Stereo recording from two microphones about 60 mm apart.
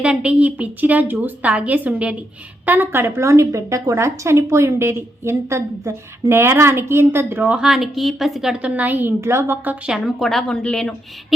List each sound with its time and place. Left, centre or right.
0.0 s a woman's voice: centre
2.6 s a woman's voice: right
7.4 s a woman's voice: centre
7.7 s a woman's voice: centre
8.5 s a woman's voice: right
9.2 s a woman's voice: right
10.1 s a woman's voice: centre